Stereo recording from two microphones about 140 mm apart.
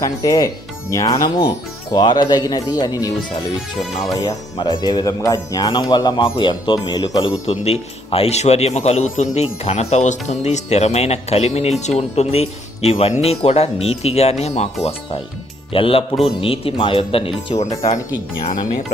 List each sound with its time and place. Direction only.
0.0 s speech: 25° left (ahead or behind)
7.4 s speech: 50° left (ahead or behind)
15.7 s speech: 40° left (ahead or behind)